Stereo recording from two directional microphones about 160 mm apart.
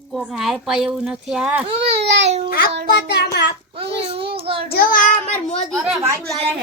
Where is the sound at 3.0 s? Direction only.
90° left.